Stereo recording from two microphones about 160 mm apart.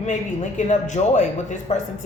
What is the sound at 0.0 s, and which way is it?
A man's voice, 45° left (ahead or behind).